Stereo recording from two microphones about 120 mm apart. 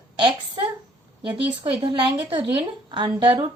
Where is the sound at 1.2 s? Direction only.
45° right (ahead or behind).